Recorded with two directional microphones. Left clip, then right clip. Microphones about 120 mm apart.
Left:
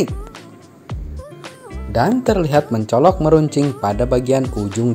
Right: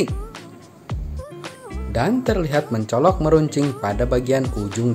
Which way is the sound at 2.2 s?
35° left (ahead or behind).